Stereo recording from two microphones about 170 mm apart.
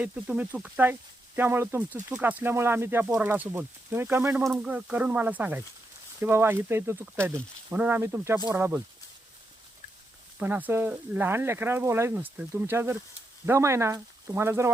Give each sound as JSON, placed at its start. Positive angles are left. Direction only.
{"t": 0.0, "sound": "speech", "side_deg": -10}
{"t": 10.3, "sound": "speech", "side_deg": -10}